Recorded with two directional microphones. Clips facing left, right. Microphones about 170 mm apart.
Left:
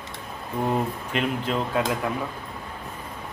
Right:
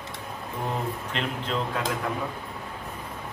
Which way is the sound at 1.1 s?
10° left (ahead or behind).